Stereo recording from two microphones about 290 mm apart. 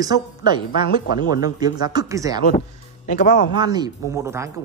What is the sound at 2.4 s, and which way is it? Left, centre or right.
Speech, left.